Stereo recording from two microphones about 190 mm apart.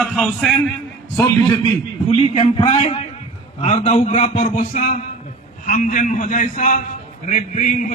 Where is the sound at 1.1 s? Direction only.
15° left (ahead or behind).